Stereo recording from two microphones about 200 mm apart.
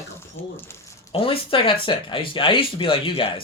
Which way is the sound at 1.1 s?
25° left (ahead or behind).